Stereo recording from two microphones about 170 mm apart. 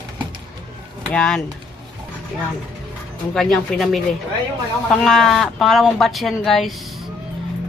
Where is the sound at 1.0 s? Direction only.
5° left (ahead or behind).